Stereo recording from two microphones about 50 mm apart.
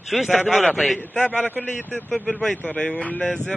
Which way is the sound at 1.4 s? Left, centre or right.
Left.